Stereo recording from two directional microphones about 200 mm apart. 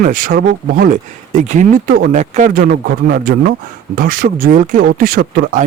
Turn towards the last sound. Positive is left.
turn(degrees=-45)  # may be behind; listen again after turning